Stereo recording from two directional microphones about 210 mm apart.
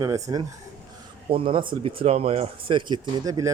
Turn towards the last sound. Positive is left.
turn(degrees=-15)  # may be behind; listen again after turning